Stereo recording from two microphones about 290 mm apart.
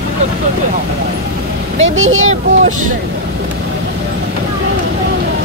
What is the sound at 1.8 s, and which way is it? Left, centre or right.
Speech, right.